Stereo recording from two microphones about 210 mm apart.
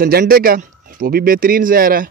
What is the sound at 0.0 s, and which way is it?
Speech, 45° right (ahead or behind).